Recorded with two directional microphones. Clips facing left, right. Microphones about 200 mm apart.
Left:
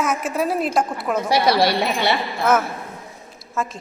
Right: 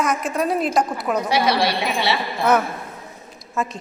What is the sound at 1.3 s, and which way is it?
Speech, 40° left (ahead or behind).